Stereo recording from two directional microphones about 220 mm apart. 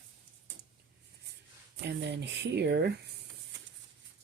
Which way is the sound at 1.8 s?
50° right (ahead or behind).